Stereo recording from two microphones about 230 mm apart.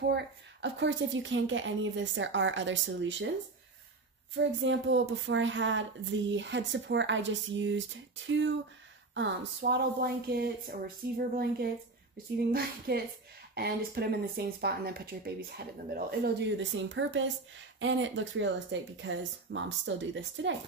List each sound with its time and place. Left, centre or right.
0.0 s speech: right
4.6 s speech: right